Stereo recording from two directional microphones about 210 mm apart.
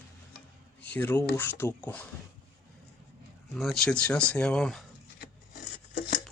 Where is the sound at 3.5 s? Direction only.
Centre (ahead or behind).